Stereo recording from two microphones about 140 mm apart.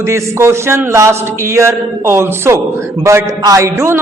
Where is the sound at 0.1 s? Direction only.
20° right (ahead or behind).